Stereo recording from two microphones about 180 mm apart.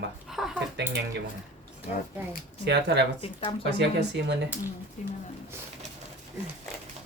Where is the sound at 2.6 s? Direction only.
70° right (ahead or behind).